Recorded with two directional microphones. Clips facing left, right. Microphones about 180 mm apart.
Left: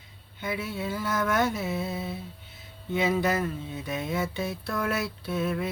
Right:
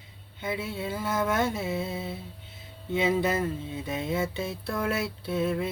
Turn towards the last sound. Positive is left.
turn(degrees=-25)  # may be behind; listen again after turning